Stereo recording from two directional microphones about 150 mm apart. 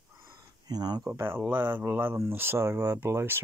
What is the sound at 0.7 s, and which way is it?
Speech, 25° right (ahead or behind).